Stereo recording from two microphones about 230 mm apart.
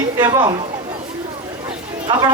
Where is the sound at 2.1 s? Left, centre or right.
Centre.